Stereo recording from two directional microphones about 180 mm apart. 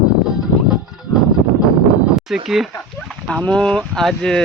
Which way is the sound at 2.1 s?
Centre (ahead or behind).